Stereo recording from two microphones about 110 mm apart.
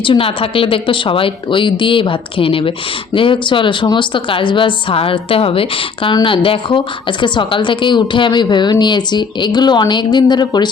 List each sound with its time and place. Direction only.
0.0 s speech: 55° left (ahead or behind)